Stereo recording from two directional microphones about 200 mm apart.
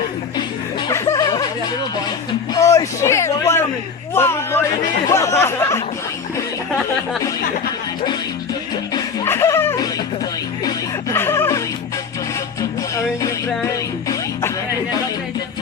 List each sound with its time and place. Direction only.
0.9 s music: 15° left (ahead or behind)
2.6 s a sound: 15° left (ahead or behind)
5.1 s speech: 15° left (ahead or behind)
9.0 s snicker: 10° left (ahead or behind)
10.7 s music: 10° left (ahead or behind)
13.7 s music: 15° left (ahead or behind)